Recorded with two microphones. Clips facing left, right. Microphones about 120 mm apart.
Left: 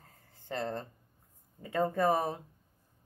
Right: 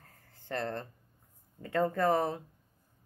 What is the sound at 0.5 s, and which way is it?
Speech, 15° left (ahead or behind).